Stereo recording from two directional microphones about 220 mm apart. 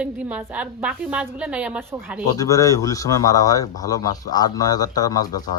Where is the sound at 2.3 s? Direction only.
15° left (ahead or behind).